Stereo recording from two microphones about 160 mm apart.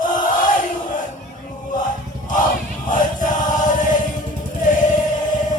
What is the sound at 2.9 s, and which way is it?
Choir, 55° left (ahead or behind).